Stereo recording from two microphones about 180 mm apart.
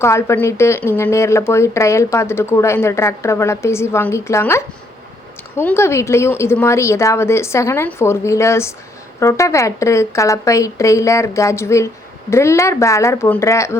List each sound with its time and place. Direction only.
0.0 s speech: 15° left (ahead or behind)